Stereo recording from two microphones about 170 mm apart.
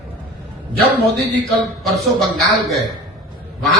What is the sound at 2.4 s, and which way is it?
Speech, 20° right (ahead or behind).